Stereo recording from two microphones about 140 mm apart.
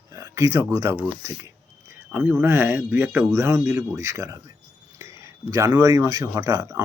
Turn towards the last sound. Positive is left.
turn(degrees=-20)  # may be behind; listen again after turning